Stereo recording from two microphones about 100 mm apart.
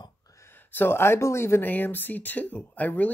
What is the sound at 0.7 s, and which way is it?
Speech, 20° left (ahead or behind).